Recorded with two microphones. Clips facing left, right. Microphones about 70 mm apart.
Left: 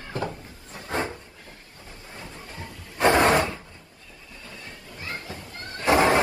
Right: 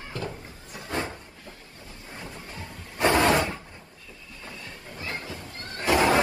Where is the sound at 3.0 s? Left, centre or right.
Left.